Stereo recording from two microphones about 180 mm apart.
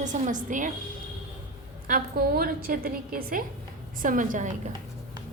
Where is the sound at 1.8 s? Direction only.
50° right (ahead or behind).